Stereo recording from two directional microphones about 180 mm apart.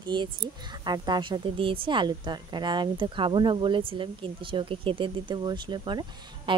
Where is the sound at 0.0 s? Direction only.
25° right (ahead or behind).